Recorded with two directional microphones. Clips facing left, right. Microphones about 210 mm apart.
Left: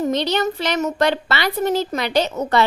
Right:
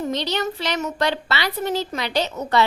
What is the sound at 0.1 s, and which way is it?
Speech, 50° left (ahead or behind).